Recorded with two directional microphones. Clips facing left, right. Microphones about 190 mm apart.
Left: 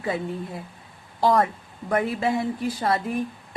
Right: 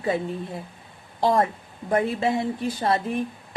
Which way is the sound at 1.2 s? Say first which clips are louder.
Left 1 dB; 25° right (ahead or behind).